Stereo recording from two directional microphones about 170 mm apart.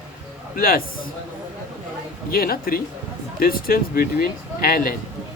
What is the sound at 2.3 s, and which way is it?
Speech, 60° left (ahead or behind).